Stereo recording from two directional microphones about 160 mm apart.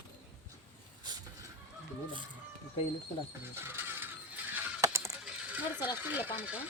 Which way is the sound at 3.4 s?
15° right (ahead or behind).